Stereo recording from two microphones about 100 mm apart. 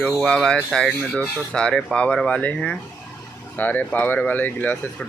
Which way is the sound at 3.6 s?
15° left (ahead or behind).